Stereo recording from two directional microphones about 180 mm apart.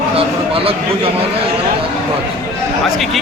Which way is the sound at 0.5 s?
30° right (ahead or behind).